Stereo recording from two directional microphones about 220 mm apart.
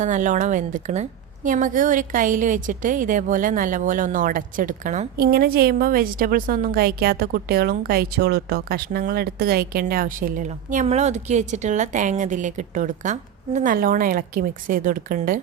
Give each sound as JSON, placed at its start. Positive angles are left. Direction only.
{"t": 0.0, "sound": "a woman's voice", "side_deg": -35}